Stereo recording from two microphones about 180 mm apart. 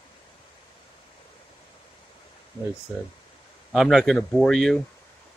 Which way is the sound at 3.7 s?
Centre (ahead or behind).